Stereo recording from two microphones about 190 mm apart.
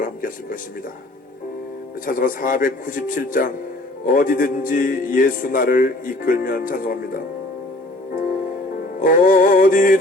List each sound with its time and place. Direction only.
0.0 s a sound: 45° left (ahead or behind)
2.0 s a man's voice: 45° left (ahead or behind)
9.0 s a man's voice: 45° left (ahead or behind)